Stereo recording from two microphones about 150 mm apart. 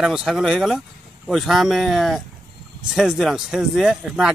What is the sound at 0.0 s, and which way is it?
Speech, 5° right (ahead or behind).